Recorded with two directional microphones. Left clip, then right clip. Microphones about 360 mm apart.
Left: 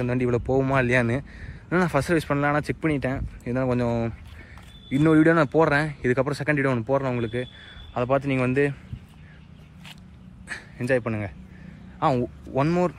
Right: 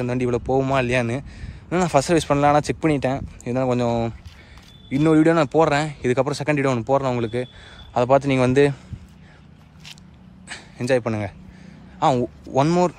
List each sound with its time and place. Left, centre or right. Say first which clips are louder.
0.0 s a man's voice: right 2 dB; centre
10.5 s a man's voice: right 3 dB; centre